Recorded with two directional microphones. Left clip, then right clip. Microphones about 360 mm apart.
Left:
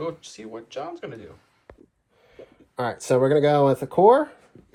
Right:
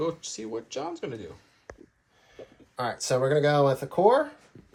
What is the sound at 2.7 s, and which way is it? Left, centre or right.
Speech, left.